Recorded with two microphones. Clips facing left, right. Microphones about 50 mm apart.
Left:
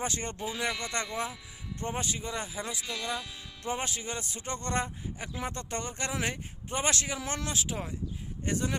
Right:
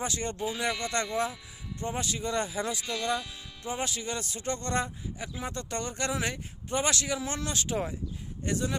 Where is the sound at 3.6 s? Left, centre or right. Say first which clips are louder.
Right 1 dB; left.